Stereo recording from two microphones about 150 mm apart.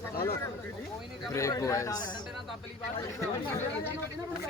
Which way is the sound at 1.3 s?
20° left (ahead or behind).